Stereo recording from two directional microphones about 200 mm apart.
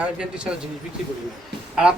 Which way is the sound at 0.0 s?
5° right (ahead or behind).